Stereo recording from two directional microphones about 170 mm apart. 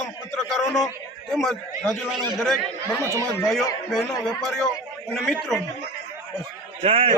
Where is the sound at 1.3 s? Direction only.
5° left (ahead or behind).